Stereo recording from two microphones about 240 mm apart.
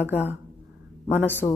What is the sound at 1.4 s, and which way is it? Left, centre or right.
Speech, centre.